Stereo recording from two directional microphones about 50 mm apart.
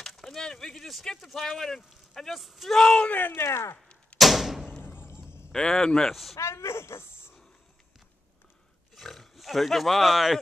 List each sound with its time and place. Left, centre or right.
0.0 s speech: centre
3.1 s speech: left
3.3 s speech: left
4.2 s door: centre
4.8 s a sound: left
5.5 s speech: centre
6.3 s speech: left
8.9 s speech: centre